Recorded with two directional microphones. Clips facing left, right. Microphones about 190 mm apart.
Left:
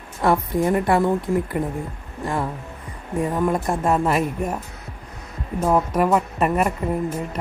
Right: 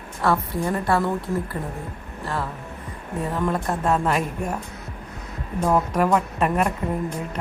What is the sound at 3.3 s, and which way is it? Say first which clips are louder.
Speech: left 2 dB; 10° left (ahead or behind).